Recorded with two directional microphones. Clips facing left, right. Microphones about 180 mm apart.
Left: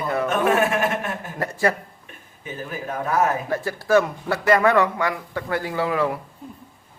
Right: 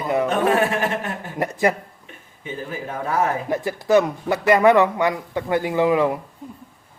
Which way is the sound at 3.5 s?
15° right (ahead or behind).